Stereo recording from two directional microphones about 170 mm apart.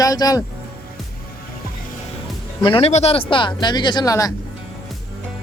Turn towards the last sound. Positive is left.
turn(degrees=20)  # may be behind; listen again after turning